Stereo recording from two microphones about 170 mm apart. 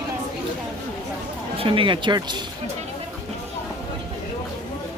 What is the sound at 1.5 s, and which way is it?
Speech, 30° right (ahead or behind).